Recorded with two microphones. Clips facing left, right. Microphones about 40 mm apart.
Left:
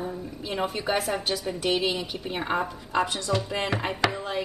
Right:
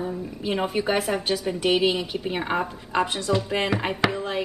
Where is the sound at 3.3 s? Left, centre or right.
Right.